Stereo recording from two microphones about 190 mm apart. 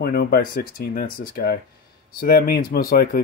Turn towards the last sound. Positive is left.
turn(degrees=50)  # may be behind; listen again after turning